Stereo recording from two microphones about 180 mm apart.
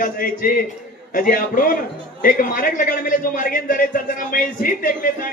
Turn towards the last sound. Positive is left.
turn(degrees=50)  # may be behind; listen again after turning